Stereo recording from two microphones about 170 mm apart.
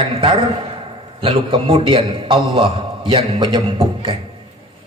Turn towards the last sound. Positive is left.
turn(degrees=-30)  # may be behind; listen again after turning